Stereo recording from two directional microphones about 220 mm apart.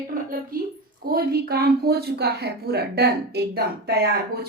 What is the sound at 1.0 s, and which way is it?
A woman's voice, 45° right (ahead or behind).